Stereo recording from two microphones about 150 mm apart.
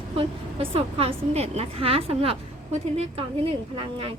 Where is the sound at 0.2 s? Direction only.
40° right (ahead or behind).